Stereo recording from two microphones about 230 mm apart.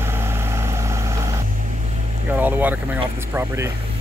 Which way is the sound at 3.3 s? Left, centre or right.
Centre.